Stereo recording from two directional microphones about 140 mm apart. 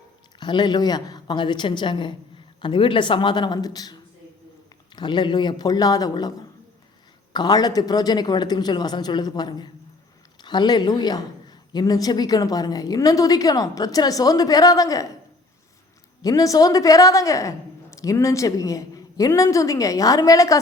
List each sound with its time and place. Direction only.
0.3 s speech: 30° left (ahead or behind)
4.9 s a woman's voice: 35° left (ahead or behind)
7.3 s a woman's voice: 30° left (ahead or behind)
16.2 s a woman's voice: 25° left (ahead or behind)